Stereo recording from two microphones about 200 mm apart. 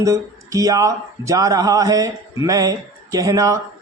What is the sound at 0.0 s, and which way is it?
Speech, 15° right (ahead or behind).